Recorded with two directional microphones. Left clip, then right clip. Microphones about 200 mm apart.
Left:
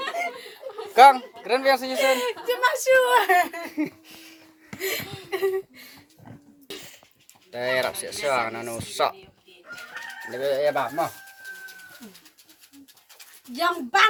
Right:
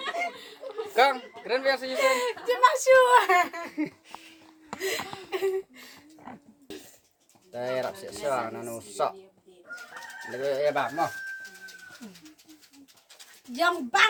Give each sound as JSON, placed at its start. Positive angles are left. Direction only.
{"t": 0.9, "sound": "speech", "side_deg": 30}
{"t": 2.0, "sound": "speech", "side_deg": 0}
{"t": 3.7, "sound": "speech", "side_deg": 25}
{"t": 4.8, "sound": "a sound", "side_deg": -10}
{"t": 7.5, "sound": "speech", "side_deg": 15}
{"t": 10.3, "sound": "speech", "side_deg": 15}
{"t": 13.5, "sound": "a sound", "side_deg": -10}